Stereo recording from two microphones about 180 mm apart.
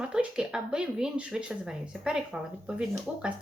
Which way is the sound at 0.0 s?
5° right (ahead or behind).